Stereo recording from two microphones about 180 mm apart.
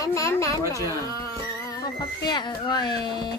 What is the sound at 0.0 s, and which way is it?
Speech, 15° left (ahead or behind).